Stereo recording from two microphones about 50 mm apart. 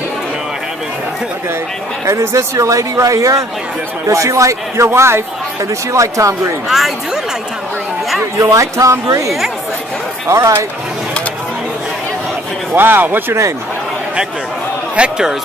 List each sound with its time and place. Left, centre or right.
2.0 s speech: right
4.9 s speech: right
5.9 s speech: right
8.4 s speech: right
12.7 s speech: right
15.0 s a man's voice: centre